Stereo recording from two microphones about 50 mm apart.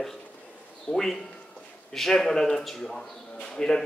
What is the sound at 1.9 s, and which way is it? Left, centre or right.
A man's voice, centre.